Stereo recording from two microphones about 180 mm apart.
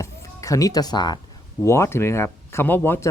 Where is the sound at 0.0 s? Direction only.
15° left (ahead or behind).